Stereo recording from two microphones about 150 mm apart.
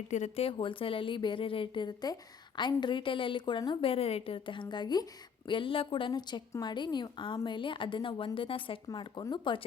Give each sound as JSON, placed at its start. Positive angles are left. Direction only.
{"t": 0.1, "sound": "a woman's voice", "side_deg": 45}